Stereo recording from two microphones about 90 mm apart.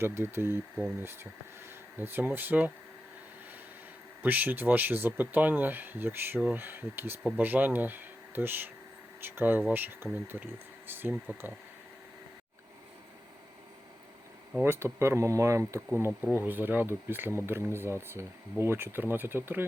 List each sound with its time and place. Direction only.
0.0 s speech: 25° right (ahead or behind)
4.2 s speech: 20° right (ahead or behind)
14.6 s speech: 25° right (ahead or behind)
16.3 s speech: 20° right (ahead or behind)